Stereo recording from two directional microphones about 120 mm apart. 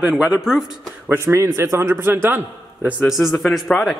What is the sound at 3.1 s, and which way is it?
Speech, centre (ahead or behind).